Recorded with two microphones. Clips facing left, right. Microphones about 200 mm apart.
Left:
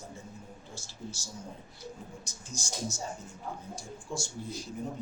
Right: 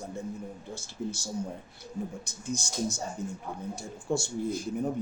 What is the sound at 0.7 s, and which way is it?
Speech, 60° right (ahead or behind).